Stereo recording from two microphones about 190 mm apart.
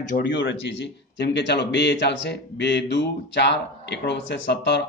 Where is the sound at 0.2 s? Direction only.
70° left (ahead or behind).